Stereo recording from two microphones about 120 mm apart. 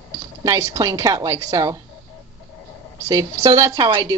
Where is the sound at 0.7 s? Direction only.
30° right (ahead or behind).